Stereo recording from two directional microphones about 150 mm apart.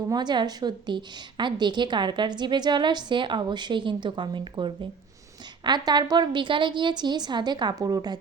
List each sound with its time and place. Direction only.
0.1 s a woman's voice: 30° right (ahead or behind)